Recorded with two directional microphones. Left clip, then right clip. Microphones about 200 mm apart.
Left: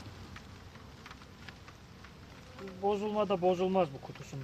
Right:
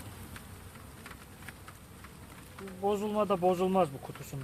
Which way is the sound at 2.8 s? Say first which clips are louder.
Right 1 dB; 15° right (ahead or behind).